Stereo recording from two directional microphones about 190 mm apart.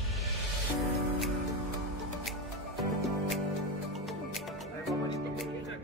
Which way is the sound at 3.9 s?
Centre (ahead or behind).